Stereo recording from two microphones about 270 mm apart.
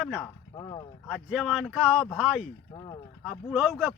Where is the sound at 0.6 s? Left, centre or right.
Centre.